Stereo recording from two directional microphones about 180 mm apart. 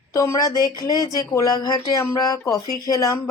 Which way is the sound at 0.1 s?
15° left (ahead or behind).